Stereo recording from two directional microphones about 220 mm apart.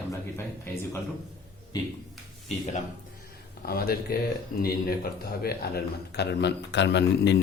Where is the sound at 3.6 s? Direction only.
45° left (ahead or behind).